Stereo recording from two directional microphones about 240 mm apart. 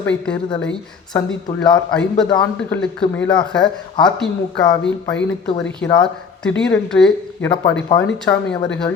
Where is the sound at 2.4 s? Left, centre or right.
Centre.